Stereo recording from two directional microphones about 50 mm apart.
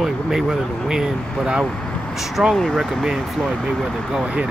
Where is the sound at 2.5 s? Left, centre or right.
Centre.